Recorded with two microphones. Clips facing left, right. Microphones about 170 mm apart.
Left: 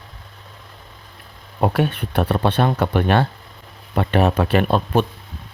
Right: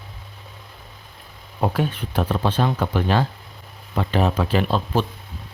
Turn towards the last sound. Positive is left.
turn(degrees=60)  # may be behind; listen again after turning